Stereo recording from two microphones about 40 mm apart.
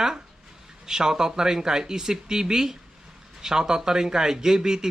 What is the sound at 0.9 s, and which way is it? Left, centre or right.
Speech, centre.